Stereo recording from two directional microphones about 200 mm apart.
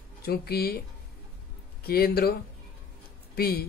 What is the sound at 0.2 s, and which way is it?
Speech, 50° left (ahead or behind).